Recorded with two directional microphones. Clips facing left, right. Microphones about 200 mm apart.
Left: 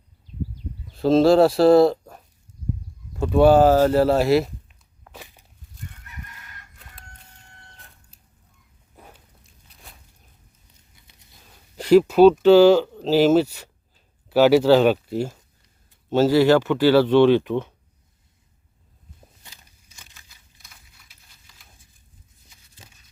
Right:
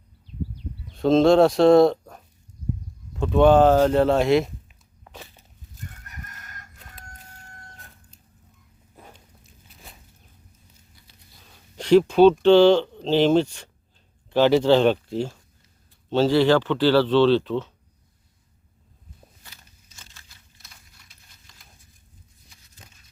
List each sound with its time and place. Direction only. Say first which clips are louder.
0.9 s speech: left 1 dB; 5° left (ahead or behind)
5.1 s walk: even; 10° left (ahead or behind)
6.1 s chicken: even; 45° right (ahead or behind)
9.0 s walk: even; 5° left (ahead or behind)
11.8 s speech: left 2 dB; 5° left (ahead or behind)
19.9 s a sound: even; 10° left (ahead or behind)
21.1 s a sound: right 1 dB; 5° left (ahead or behind)